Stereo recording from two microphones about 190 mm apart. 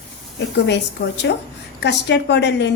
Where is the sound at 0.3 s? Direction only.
65° left (ahead or behind).